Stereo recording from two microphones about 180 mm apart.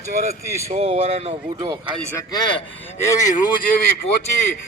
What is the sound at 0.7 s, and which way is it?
Speech, 35° right (ahead or behind).